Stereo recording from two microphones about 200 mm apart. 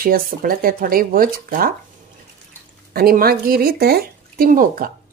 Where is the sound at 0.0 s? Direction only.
45° right (ahead or behind).